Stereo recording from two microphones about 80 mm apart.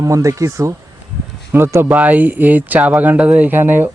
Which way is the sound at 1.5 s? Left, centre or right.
Right.